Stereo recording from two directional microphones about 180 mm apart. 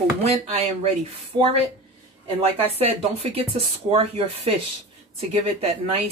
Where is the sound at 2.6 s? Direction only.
35° right (ahead or behind).